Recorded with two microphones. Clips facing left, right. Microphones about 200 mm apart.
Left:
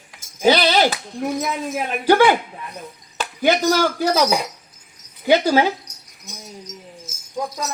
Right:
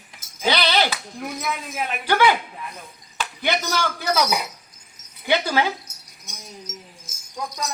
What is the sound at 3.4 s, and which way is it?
Speech, 45° left (ahead or behind).